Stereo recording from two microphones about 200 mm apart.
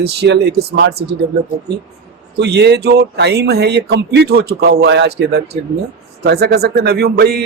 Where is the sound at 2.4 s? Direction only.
55° right (ahead or behind).